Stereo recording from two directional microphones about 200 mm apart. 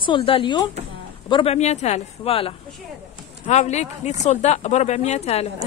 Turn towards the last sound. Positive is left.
turn(degrees=30)  # may be behind; listen again after turning